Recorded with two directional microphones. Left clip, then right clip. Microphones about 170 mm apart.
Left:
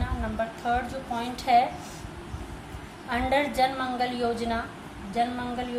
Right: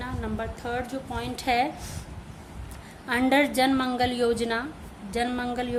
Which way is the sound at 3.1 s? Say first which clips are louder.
Right 3 dB; 55° right (ahead or behind).